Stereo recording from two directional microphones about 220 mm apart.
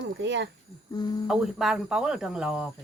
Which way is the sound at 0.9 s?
20° left (ahead or behind).